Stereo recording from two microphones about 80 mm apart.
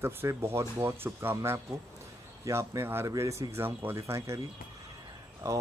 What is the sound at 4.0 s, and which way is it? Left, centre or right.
Speech, right.